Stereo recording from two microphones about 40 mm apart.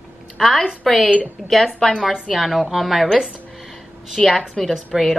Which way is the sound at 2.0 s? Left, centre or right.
Centre.